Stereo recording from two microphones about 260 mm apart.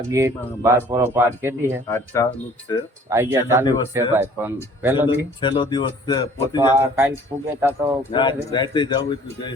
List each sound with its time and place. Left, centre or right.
0.1 s speech: centre
1.9 s speech: centre
3.1 s speech: centre
5.0 s speech: centre
6.7 s speech: centre
7.7 s speech: centre